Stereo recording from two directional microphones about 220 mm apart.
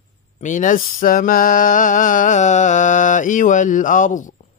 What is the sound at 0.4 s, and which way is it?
Male singing, 35° left (ahead or behind).